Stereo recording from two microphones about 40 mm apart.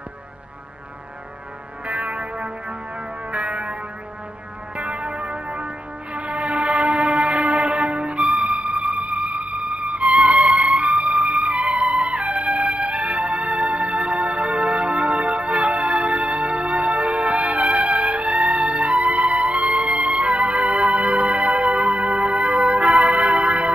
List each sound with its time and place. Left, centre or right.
1.9 s music: right
4.7 s music: right
20.0 s music: right
20.2 s music: right